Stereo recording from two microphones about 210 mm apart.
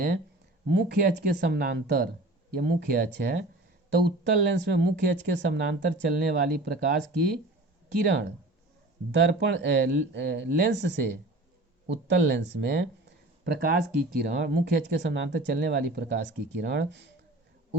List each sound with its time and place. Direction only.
0.7 s speech: 55° right (ahead or behind)